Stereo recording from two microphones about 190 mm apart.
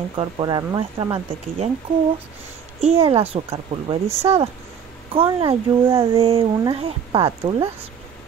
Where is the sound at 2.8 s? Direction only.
30° right (ahead or behind).